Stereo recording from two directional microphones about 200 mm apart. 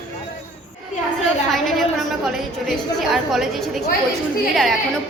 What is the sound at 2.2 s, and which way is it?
A woman's voice, centre (ahead or behind).